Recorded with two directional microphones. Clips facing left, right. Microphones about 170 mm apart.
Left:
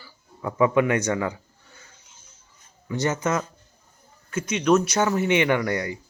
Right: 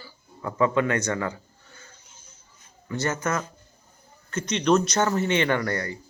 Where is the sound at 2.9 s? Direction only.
15° left (ahead or behind).